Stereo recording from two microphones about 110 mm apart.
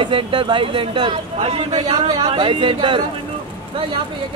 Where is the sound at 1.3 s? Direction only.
60° right (ahead or behind).